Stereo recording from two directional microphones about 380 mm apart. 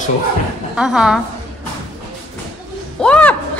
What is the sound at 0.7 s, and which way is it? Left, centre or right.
Speech, centre.